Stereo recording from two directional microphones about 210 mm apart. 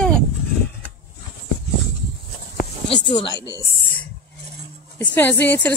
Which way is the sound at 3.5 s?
15° left (ahead or behind).